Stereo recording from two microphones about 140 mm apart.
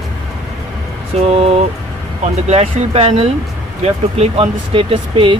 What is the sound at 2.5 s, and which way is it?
Speech, 50° right (ahead or behind).